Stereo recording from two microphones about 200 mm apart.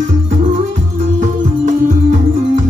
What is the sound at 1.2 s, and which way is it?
Music, 40° right (ahead or behind).